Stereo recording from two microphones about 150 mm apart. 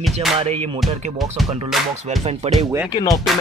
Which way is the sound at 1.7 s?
Centre (ahead or behind).